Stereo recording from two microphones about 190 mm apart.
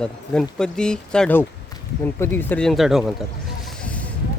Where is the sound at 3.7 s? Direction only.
5° left (ahead or behind).